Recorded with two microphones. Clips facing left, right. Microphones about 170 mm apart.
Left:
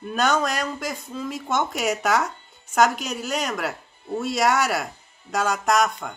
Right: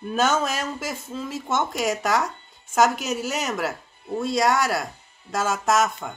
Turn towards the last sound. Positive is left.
turn(degrees=-5)  # may be behind; listen again after turning